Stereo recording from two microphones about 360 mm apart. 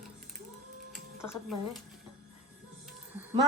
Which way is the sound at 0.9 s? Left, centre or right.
Centre.